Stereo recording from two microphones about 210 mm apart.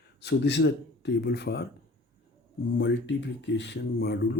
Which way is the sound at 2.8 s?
55° left (ahead or behind).